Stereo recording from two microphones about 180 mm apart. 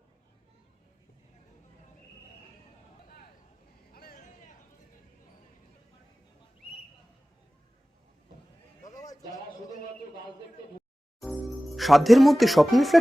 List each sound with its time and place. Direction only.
3.9 s vehicle: 55° left (ahead or behind)
8.8 s a sound: 20° left (ahead or behind)
11.2 s speech: centre (ahead or behind)